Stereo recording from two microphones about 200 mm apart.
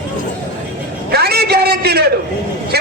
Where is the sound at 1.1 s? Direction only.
50° right (ahead or behind).